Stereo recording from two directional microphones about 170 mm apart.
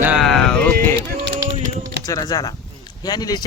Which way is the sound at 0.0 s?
5° right (ahead or behind).